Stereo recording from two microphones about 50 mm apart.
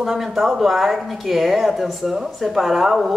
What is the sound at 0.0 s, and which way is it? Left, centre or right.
A woman's voice, centre.